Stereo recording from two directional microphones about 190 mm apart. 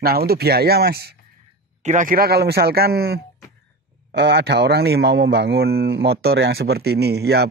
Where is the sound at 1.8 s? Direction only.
45° right (ahead or behind).